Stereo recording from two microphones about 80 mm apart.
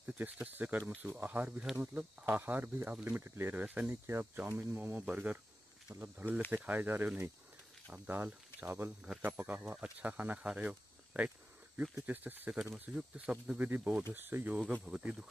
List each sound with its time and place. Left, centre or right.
0.0 s speech: right
3.9 s speech: right
12.9 s speech: centre